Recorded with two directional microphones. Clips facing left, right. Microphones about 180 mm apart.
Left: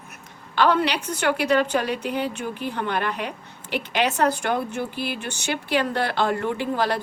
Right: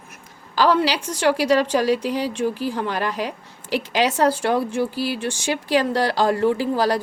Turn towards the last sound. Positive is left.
turn(degrees=-35)  # may be behind; listen again after turning